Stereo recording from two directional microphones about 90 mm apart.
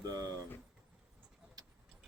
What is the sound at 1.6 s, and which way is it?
Vehicle, 45° right (ahead or behind).